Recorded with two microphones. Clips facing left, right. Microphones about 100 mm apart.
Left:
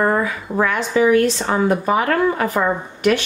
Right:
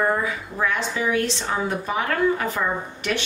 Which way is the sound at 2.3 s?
70° left (ahead or behind).